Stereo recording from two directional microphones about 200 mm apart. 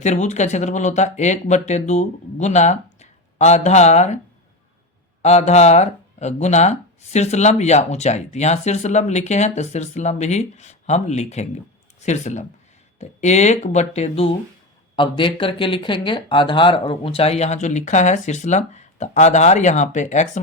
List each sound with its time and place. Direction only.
0.0 s speech: 35° left (ahead or behind)
5.2 s speech: 35° left (ahead or behind)